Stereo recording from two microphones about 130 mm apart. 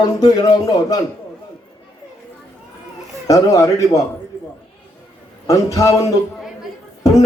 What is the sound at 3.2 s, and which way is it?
Speech, 25° left (ahead or behind).